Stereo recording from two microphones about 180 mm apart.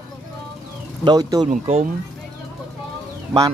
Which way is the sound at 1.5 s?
40° right (ahead or behind).